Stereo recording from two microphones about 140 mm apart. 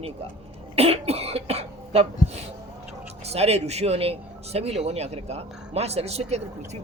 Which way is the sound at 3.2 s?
50° right (ahead or behind).